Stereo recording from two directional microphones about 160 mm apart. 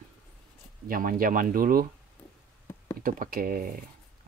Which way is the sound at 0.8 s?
60° right (ahead or behind).